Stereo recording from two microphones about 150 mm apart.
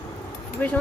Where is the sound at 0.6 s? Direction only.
10° left (ahead or behind).